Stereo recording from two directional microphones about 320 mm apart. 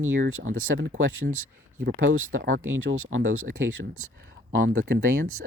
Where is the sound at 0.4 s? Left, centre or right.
Right.